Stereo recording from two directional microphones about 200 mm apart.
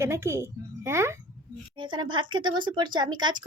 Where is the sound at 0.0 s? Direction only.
15° right (ahead or behind).